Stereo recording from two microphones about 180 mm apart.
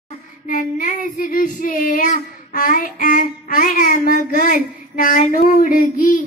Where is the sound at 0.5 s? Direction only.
50° left (ahead or behind).